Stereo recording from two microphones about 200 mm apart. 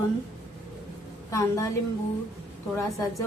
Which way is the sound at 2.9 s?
15° left (ahead or behind).